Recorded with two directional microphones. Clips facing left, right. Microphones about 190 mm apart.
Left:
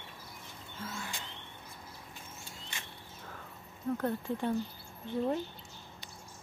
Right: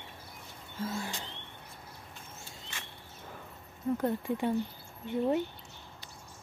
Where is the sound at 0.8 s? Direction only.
35° right (ahead or behind).